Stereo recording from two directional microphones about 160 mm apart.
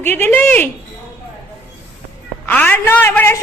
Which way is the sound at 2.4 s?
10° left (ahead or behind).